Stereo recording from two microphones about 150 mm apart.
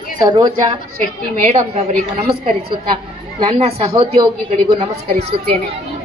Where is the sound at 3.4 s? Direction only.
45° right (ahead or behind).